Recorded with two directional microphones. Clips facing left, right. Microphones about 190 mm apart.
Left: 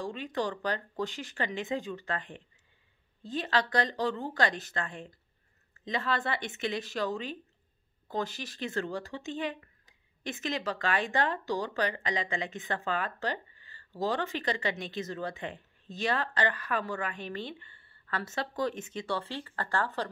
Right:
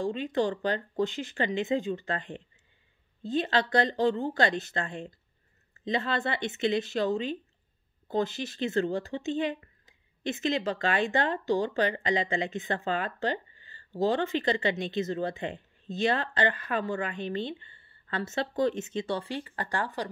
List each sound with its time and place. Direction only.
0.3 s speech: 25° right (ahead or behind)